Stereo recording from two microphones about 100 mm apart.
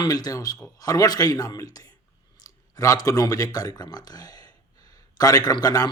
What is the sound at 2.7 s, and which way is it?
Speech, 35° left (ahead or behind).